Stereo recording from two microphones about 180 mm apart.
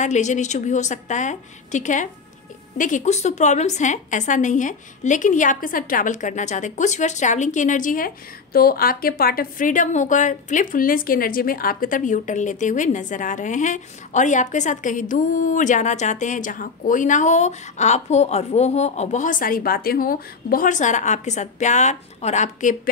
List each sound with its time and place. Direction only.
0.0 s a woman's voice: 40° left (ahead or behind)